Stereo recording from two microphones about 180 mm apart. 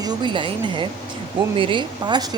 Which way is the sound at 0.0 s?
25° right (ahead or behind).